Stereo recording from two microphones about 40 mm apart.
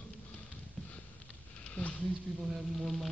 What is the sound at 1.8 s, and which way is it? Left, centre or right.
Speech, left.